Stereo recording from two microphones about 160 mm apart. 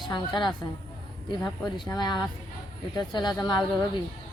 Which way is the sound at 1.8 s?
25° left (ahead or behind).